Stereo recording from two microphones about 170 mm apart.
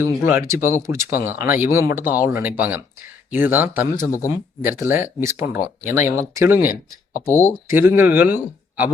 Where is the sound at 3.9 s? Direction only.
20° left (ahead or behind).